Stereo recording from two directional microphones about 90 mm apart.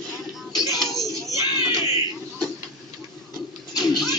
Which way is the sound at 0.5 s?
45° left (ahead or behind).